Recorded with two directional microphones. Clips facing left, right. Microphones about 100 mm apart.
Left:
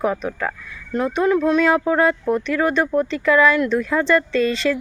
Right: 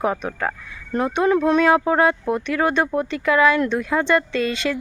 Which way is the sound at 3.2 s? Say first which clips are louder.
Left 1 dB; 25° right (ahead or behind).